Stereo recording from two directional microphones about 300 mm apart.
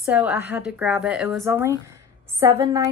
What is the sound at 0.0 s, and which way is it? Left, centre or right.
A woman's voice, centre.